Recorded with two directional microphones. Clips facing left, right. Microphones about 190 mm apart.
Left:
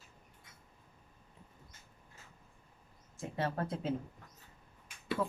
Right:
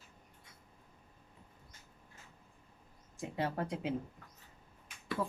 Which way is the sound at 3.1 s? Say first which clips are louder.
Even; 15° right (ahead or behind).